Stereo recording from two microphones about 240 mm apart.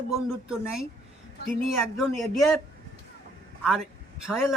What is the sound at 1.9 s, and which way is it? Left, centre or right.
Speech, centre.